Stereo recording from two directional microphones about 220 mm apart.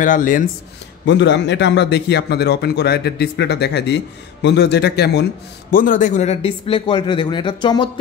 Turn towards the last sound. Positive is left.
turn(degrees=20)  # may be behind; listen again after turning